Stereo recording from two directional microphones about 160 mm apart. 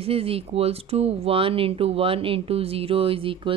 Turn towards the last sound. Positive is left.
turn(degrees=-35)  # may be behind; listen again after turning